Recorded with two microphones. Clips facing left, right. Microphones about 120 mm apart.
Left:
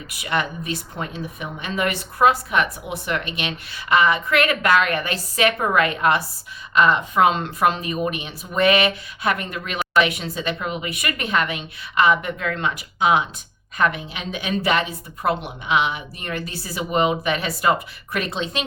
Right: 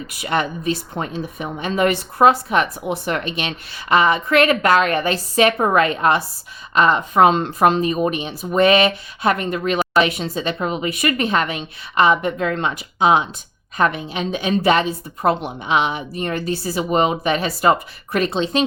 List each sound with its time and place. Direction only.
0.2 s a woman's voice: 35° right (ahead or behind)